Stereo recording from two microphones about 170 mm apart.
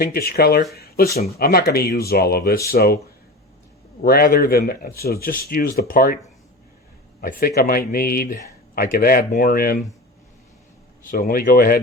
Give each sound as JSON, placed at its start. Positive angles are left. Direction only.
{"t": 0.0, "sound": "speech", "side_deg": 65}
{"t": 0.7, "sound": "a sound", "side_deg": 65}
{"t": 1.4, "sound": "speech", "side_deg": 65}
{"t": 4.0, "sound": "speech", "side_deg": 65}
{"t": 7.2, "sound": "speech", "side_deg": 60}
{"t": 11.0, "sound": "speech", "side_deg": 60}